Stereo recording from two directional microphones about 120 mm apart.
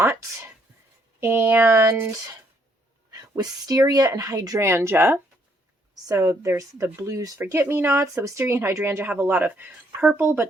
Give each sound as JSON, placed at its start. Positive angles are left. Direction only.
{"t": 0.0, "sound": "speech", "side_deg": -20}
{"t": 3.1, "sound": "speech", "side_deg": -30}